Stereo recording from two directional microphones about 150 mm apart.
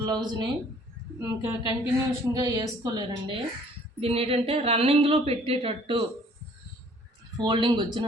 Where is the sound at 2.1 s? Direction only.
25° right (ahead or behind).